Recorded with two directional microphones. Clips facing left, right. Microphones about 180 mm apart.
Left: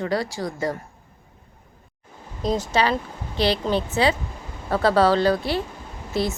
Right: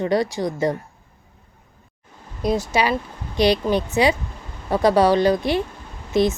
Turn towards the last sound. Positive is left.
turn(degrees=-20)  # may be behind; listen again after turning